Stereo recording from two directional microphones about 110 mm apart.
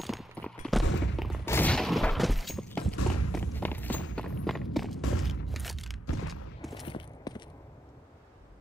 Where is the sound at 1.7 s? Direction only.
5° left (ahead or behind).